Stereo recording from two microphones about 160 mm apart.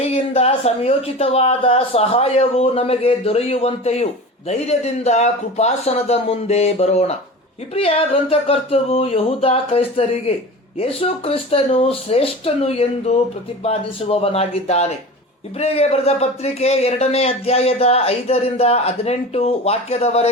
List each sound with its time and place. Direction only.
0.1 s speech: 40° left (ahead or behind)